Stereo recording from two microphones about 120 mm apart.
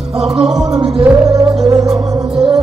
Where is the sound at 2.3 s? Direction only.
5° right (ahead or behind).